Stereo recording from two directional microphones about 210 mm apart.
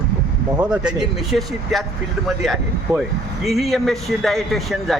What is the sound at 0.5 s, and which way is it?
A man's voice, 5° right (ahead or behind).